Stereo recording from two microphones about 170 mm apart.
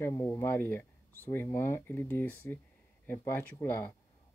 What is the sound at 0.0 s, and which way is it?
Speech, 15° left (ahead or behind).